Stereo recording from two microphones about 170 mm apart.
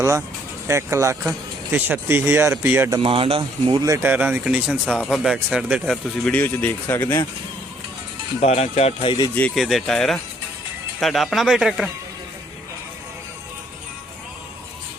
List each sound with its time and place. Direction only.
0.7 s speech: 15° right (ahead or behind)
3.0 s speech: 30° right (ahead or behind); by 7.3 s 15° left (ahead or behind)
8.4 s speech: 40° left (ahead or behind)
9.3 s speech: 5° left (ahead or behind)